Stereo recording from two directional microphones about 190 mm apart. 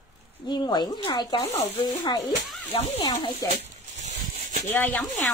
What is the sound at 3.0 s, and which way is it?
Speech, 20° left (ahead or behind).